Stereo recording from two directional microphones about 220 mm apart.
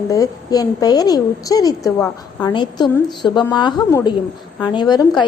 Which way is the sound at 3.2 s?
20° left (ahead or behind).